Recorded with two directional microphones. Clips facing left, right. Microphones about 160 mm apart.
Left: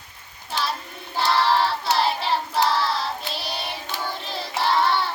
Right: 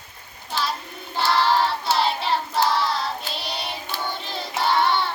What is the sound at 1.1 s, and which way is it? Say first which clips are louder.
Child singing: even; centre (ahead or behind).